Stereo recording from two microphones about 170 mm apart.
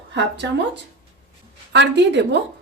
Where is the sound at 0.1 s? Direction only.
90° right.